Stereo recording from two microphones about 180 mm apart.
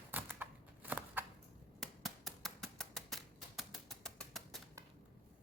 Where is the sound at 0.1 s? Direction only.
10° right (ahead or behind).